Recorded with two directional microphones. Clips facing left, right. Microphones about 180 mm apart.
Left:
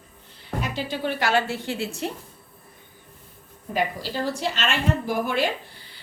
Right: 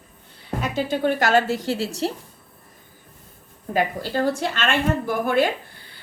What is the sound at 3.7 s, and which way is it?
A woman's voice, 50° right (ahead or behind).